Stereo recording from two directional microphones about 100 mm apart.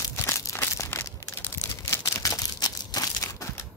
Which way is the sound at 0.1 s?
30° left (ahead or behind).